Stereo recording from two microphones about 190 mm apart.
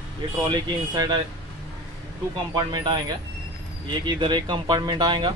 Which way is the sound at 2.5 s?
20° right (ahead or behind).